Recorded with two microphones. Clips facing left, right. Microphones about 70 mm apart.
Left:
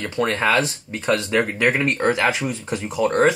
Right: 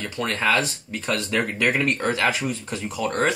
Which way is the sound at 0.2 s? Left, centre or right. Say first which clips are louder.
Left 6 dB; left.